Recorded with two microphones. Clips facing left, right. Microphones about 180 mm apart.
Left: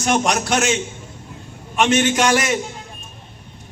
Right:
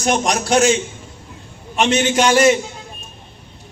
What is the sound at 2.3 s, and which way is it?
Speech, 30° right (ahead or behind).